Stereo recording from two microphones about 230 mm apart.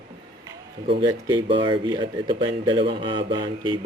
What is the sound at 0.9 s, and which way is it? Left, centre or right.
Speech, centre.